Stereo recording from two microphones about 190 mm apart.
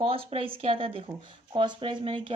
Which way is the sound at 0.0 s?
30° right (ahead or behind).